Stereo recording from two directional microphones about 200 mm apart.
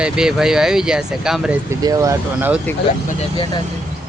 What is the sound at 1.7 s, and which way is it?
Speech, 15° right (ahead or behind).